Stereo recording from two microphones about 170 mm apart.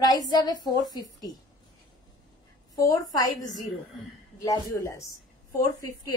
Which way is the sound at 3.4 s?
25° left (ahead or behind).